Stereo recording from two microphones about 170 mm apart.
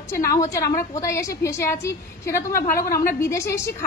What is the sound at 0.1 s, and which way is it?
A woman's voice, 20° left (ahead or behind).